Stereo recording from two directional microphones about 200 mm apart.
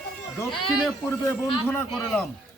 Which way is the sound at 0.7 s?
Centre (ahead or behind).